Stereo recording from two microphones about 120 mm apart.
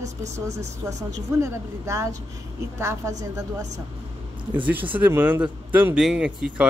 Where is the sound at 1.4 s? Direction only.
25° right (ahead or behind).